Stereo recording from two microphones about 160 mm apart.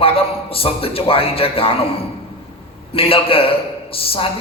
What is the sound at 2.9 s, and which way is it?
A man's voice, 35° left (ahead or behind).